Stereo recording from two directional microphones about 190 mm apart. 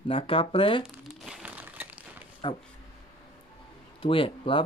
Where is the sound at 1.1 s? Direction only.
5° right (ahead or behind).